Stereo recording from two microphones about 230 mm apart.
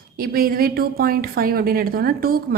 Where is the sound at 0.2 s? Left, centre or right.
Right.